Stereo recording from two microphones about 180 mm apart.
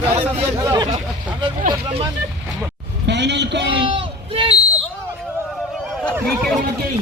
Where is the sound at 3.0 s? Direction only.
70° right (ahead or behind).